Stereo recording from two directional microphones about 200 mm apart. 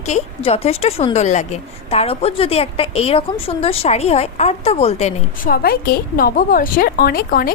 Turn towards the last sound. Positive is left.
turn(degrees=45)  # may be behind; listen again after turning